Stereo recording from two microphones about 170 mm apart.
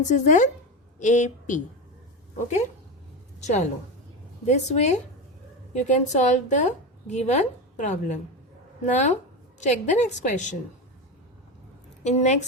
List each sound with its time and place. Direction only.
0.1 s a woman's voice: 45° left (ahead or behind)
3.4 s a woman's voice: 45° left (ahead or behind)
12.0 s a woman's voice: 45° left (ahead or behind)